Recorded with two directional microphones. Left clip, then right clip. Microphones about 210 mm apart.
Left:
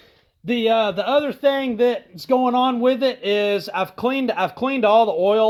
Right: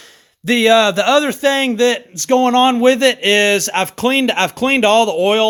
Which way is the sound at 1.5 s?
55° right (ahead or behind).